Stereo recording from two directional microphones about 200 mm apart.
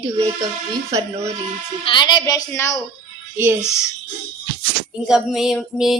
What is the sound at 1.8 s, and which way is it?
A woman's voice, 25° left (ahead or behind).